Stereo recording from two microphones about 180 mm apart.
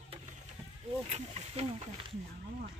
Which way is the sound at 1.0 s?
35° right (ahead or behind).